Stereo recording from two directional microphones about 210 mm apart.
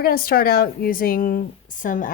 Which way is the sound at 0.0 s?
45° left (ahead or behind).